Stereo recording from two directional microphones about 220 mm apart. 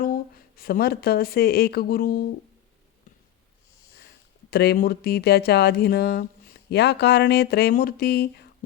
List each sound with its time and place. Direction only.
0.0 s a woman's voice: 40° left (ahead or behind)
4.5 s speech: 45° left (ahead or behind)